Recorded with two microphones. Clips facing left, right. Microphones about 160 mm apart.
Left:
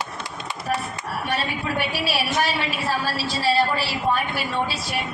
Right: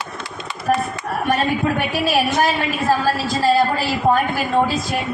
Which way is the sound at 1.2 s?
50° right (ahead or behind).